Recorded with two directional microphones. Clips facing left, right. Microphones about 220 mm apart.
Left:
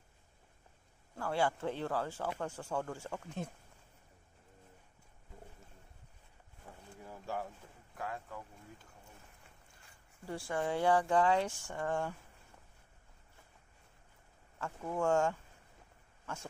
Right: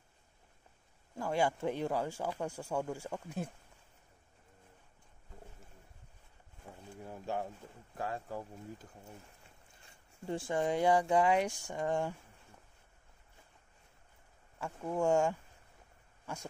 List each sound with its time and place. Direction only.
1.1 s speech: 15° right (ahead or behind)
7.1 s a sound: 20° right (ahead or behind)
8.0 s speech: 35° right (ahead or behind)
10.5 s speech: 15° right (ahead or behind)
14.6 s speech: 15° right (ahead or behind)